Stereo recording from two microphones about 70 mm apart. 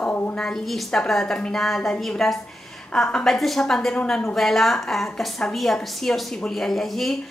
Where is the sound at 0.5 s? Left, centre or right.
Centre.